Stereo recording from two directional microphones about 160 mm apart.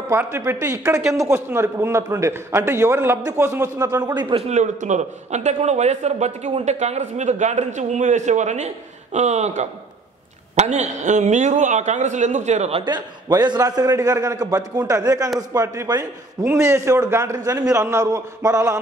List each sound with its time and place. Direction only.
0.1 s a man's voice: 15° right (ahead or behind)
4.5 s a man's voice: 50° right (ahead or behind)
12.8 s a man's voice: 25° right (ahead or behind)